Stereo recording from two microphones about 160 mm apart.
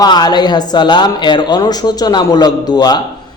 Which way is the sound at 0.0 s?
25° left (ahead or behind).